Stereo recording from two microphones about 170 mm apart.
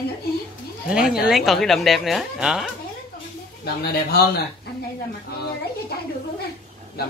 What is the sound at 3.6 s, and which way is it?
Speech, 70° left (ahead or behind).